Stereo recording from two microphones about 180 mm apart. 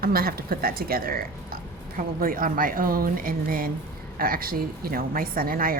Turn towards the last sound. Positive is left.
turn(degrees=-55)  # may be behind; listen again after turning